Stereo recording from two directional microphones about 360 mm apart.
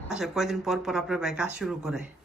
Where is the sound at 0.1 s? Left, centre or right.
Centre.